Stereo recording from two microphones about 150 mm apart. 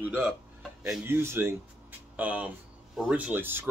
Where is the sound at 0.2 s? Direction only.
Centre (ahead or behind).